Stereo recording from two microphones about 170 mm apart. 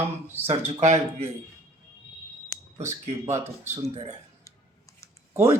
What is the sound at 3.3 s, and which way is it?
Speech, 15° right (ahead or behind).